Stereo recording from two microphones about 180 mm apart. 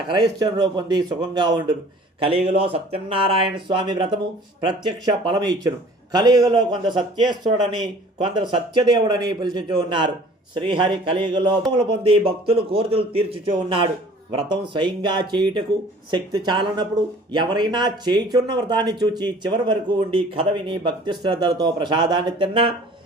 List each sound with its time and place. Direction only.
0.1 s speech: 25° right (ahead or behind)
8.2 s a man's voice: 25° right (ahead or behind)